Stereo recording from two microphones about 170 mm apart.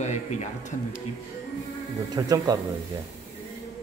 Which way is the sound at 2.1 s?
20° right (ahead or behind).